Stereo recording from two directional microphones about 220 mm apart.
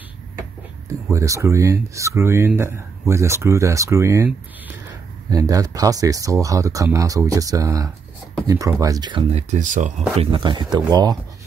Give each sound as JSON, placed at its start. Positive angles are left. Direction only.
{"t": 1.1, "sound": "speech", "side_deg": -15}
{"t": 5.3, "sound": "speech", "side_deg": -15}
{"t": 9.5, "sound": "speech", "side_deg": -35}